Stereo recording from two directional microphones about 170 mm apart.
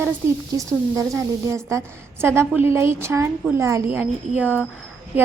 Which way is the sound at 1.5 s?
15° right (ahead or behind).